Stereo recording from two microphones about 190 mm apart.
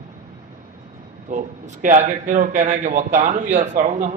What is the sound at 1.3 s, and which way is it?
A man's voice, 40° right (ahead or behind).